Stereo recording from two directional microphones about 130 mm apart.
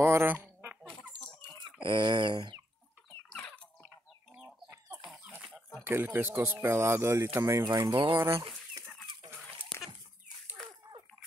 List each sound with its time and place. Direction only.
0.0 s duck: 15° right (ahead or behind)
1.6 s chicken: 40° right (ahead or behind)
3.3 s a sound: 5° left (ahead or behind)
4.4 s chicken: 10° right (ahead or behind)
5.9 s speech: 15° right (ahead or behind)
7.9 s speech: 40° right (ahead or behind)
9.2 s chicken: 50° right (ahead or behind)